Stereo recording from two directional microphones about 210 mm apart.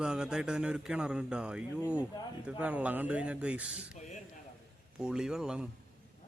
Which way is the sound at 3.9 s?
35° left (ahead or behind).